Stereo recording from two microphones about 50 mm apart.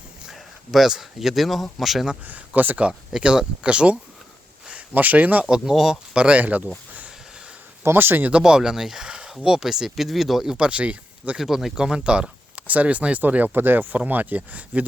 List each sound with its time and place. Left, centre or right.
0.3 s speech: centre
2.2 s speech: right
3.2 s speech: centre
4.9 s speech: right
5.5 s speech: centre
6.1 s speech: right
7.9 s speech: right
8.3 s speech: centre
9.0 s a sound: right
9.4 s speech: centre
11.3 s speech: centre
11.7 s speech: centre